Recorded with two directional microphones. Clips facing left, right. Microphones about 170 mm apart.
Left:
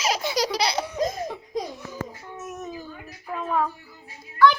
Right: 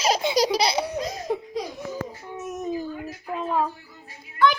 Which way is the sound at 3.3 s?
25° right (ahead or behind).